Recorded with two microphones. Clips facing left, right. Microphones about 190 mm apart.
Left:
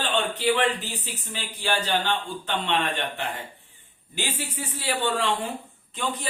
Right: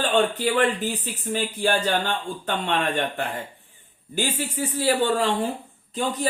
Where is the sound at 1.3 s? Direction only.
45° right (ahead or behind).